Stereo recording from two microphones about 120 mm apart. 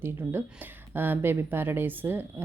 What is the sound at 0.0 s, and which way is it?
Speech, 20° right (ahead or behind).